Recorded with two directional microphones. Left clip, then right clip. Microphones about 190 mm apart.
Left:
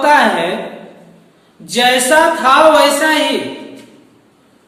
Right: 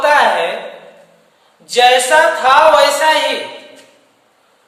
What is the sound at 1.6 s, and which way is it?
A woman's voice, centre (ahead or behind).